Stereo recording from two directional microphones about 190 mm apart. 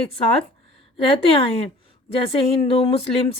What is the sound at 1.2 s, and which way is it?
Speech, 30° left (ahead or behind).